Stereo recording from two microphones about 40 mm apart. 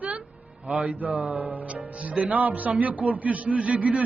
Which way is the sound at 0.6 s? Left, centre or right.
Right.